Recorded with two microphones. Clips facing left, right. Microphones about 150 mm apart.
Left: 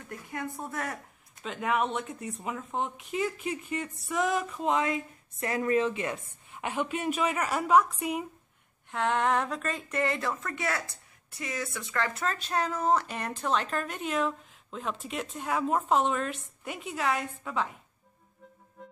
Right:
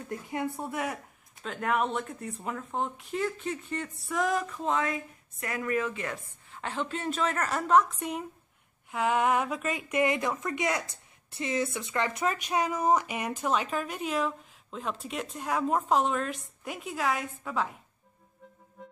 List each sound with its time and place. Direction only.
0.3 s speech: 15° right (ahead or behind)
1.4 s speech: centre (ahead or behind)
4.6 s a woman's voice: 15° left (ahead or behind)
5.4 s a woman's voice: 25° left (ahead or behind); by 8.3 s 5° left (ahead or behind)
8.9 s speech: 5° right (ahead or behind)
18.8 s music: centre (ahead or behind)